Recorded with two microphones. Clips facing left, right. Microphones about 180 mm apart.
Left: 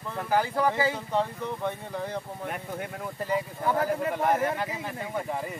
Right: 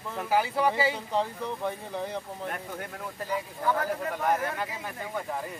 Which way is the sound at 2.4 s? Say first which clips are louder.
Left 2 dB; 5° left (ahead or behind).